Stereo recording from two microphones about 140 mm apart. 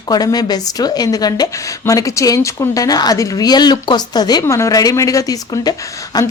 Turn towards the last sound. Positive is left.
turn(degrees=30)  # may be behind; listen again after turning